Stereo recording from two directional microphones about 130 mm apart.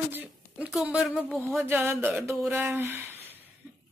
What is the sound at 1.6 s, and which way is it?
Speech, 15° right (ahead or behind).